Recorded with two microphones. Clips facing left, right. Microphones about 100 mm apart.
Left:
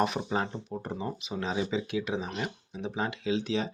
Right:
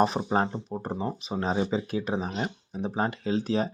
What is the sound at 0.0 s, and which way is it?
Speech, 35° right (ahead or behind).